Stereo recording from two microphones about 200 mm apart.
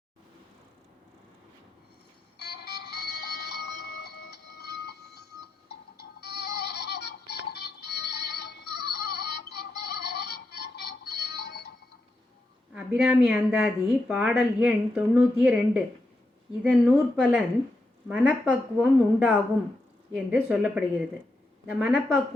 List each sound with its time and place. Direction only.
2.4 s music: 55° left (ahead or behind)
12.7 s speech: 5° right (ahead or behind)